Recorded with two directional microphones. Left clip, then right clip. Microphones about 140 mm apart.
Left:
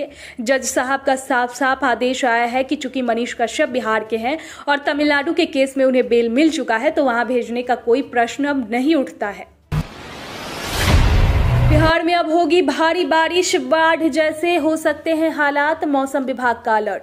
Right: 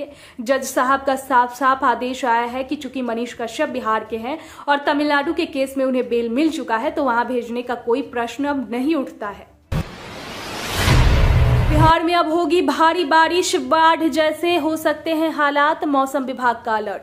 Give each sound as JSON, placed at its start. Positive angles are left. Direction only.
{"t": 0.5, "sound": "a woman's voice", "side_deg": 20}
{"t": 11.7, "sound": "a woman's voice", "side_deg": 5}